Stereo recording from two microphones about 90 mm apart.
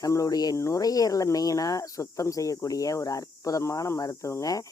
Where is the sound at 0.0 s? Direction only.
40° left (ahead or behind).